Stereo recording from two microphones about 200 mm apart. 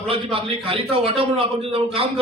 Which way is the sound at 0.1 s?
25° right (ahead or behind).